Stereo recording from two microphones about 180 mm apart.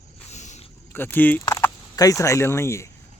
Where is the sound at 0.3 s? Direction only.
40° left (ahead or behind).